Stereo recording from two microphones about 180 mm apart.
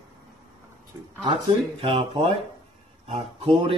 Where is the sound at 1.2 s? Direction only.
30° right (ahead or behind).